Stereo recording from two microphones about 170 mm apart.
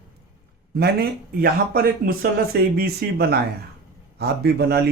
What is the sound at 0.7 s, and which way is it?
Speech, 70° right (ahead or behind).